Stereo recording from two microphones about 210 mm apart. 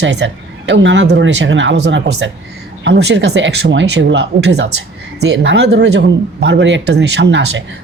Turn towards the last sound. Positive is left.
turn(degrees=-60)  # may be behind; listen again after turning